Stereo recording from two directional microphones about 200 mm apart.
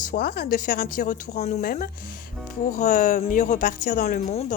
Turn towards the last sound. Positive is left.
turn(degrees=30)  # may be behind; listen again after turning